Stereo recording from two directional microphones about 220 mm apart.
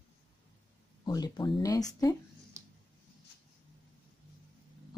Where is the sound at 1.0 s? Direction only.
20° left (ahead or behind).